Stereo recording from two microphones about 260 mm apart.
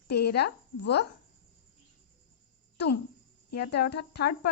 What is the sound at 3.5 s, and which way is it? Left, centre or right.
Speech, left.